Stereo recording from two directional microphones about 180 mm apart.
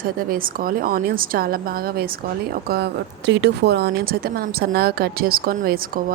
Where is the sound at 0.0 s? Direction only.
55° right (ahead or behind).